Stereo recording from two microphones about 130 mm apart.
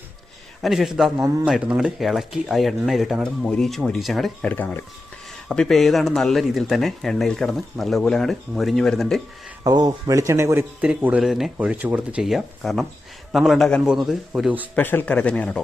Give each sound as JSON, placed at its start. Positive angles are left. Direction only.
{"t": 0.6, "sound": "speech", "side_deg": 0}
{"t": 4.5, "sound": "speech", "side_deg": 15}
{"t": 5.5, "sound": "speech", "side_deg": 0}
{"t": 9.6, "sound": "speech", "side_deg": -30}
{"t": 14.8, "sound": "speech", "side_deg": 15}